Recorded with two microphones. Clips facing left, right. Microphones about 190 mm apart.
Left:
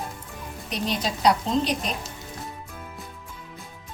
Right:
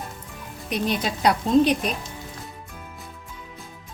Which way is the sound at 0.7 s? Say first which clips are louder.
Right 3 dB; 55° right (ahead or behind).